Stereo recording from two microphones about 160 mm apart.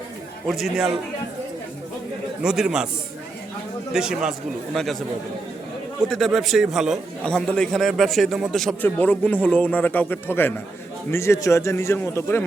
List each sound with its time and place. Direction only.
0.4 s a man's voice: centre (ahead or behind)
2.4 s a man's voice: 5° right (ahead or behind)
3.9 s a man's voice: 5° right (ahead or behind)
6.1 s a man's voice: centre (ahead or behind)